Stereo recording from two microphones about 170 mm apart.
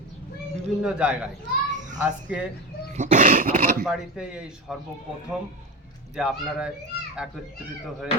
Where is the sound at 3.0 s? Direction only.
45° right (ahead or behind).